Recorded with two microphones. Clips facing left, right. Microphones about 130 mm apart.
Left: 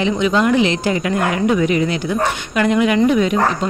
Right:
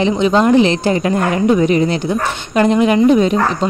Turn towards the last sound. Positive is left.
turn(degrees=-30)  # may be behind; listen again after turning